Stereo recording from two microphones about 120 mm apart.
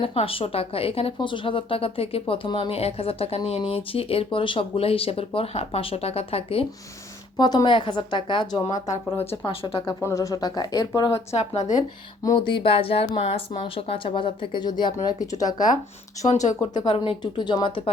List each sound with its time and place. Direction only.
0.0 s speech: 50° left (ahead or behind)
7.3 s speech: 35° left (ahead or behind)
9.5 s speech: 50° left (ahead or behind)
9.8 s speech: 25° left (ahead or behind)
11.1 s speech: 65° left (ahead or behind)
12.5 s speech: 45° left (ahead or behind); by 15.5 s 30° left (ahead or behind)
15.5 s speech: 90° left
16.6 s speech: 35° left (ahead or behind)
16.9 s speech: 45° left (ahead or behind)